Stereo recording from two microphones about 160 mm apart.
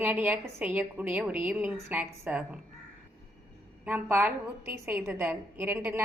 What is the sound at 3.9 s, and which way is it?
A woman's voice, 10° right (ahead or behind).